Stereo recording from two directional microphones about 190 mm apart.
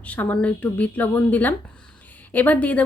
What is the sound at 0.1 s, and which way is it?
A woman's voice, 10° left (ahead or behind).